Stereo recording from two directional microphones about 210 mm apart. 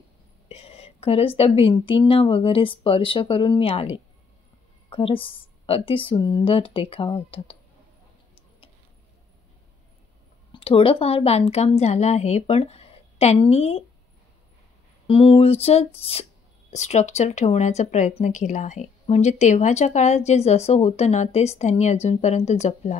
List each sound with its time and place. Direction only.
0.5 s a woman's voice: 30° left (ahead or behind)
10.5 s a woman's voice: 25° left (ahead or behind)
15.0 s a woman's voice: 25° left (ahead or behind)